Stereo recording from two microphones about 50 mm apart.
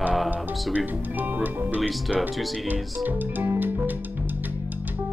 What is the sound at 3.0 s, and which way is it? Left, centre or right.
Music, right.